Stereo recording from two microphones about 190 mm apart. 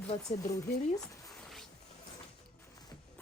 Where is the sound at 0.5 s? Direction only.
15° left (ahead or behind).